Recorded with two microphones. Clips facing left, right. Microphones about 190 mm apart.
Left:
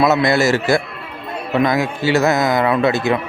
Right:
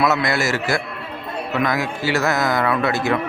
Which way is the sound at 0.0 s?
25° left (ahead or behind).